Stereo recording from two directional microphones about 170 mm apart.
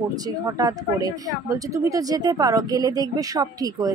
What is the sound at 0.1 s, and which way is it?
Speech, 20° right (ahead or behind).